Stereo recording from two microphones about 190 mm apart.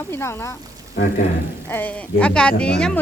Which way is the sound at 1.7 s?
10° left (ahead or behind).